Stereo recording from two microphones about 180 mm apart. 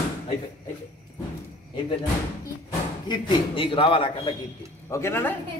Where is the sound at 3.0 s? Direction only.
30° left (ahead or behind).